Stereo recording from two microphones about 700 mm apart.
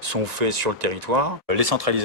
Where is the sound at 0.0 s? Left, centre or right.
Right.